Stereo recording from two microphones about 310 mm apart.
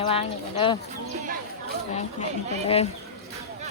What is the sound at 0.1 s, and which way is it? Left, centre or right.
Speech, centre.